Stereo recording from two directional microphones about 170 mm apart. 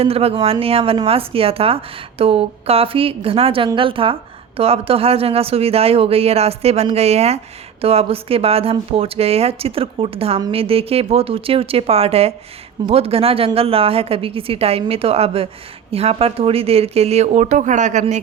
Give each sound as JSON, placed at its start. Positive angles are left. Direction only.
{"t": 0.0, "sound": "speech", "side_deg": -35}